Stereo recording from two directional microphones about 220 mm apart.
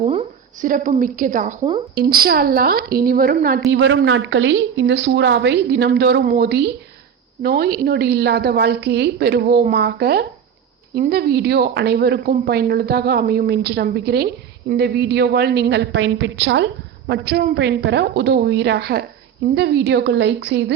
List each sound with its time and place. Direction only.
0.0 s a woman's voice: 30° right (ahead or behind)
3.7 s a woman's voice: 55° right (ahead or behind)